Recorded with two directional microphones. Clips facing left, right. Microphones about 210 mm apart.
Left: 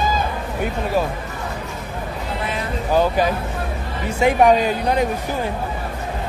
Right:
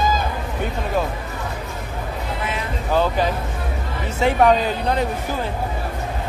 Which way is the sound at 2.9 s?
10° left (ahead or behind).